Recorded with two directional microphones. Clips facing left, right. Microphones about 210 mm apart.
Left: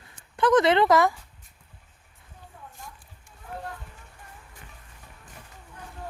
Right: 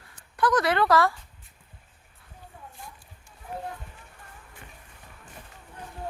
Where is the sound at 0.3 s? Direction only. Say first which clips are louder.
Left 4 dB; 25° left (ahead or behind).